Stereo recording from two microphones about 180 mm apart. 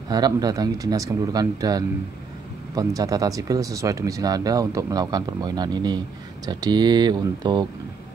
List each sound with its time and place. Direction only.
0.1 s speech: 20° right (ahead or behind)